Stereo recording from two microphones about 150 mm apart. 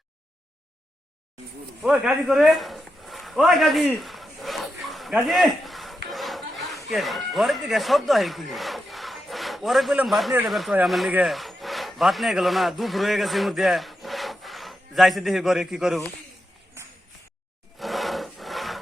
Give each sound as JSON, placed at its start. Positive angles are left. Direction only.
{"t": 1.8, "sound": "a man's voice", "side_deg": 0}
{"t": 3.9, "sound": "a sound", "side_deg": 0}
{"t": 10.4, "sound": "speech", "side_deg": 0}
{"t": 10.8, "sound": "wood", "side_deg": 0}
{"t": 17.7, "sound": "sawing", "side_deg": 0}